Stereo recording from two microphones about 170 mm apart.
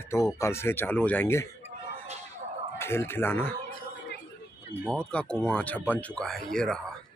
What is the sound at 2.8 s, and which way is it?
Speech, 15° left (ahead or behind).